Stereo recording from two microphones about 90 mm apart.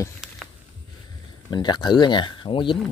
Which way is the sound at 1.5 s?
55° left (ahead or behind).